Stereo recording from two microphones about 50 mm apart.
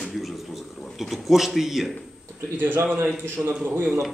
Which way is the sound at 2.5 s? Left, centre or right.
Right.